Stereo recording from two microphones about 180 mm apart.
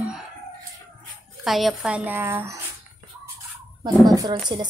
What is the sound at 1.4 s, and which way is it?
Speech, centre (ahead or behind).